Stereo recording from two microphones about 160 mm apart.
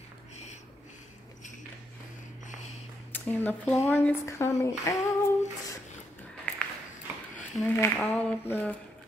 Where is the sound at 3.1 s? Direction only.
10° left (ahead or behind).